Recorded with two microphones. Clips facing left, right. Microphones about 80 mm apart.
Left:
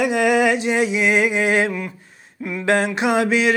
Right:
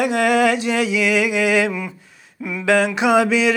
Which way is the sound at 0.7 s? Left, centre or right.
Right.